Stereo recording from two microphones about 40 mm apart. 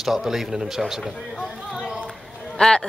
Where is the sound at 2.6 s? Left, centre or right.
Left.